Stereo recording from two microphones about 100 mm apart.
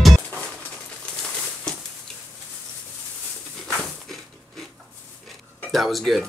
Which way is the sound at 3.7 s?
Centre (ahead or behind).